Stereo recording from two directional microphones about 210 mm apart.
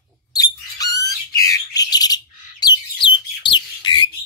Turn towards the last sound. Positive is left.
turn(degrees=20)  # may be behind; listen again after turning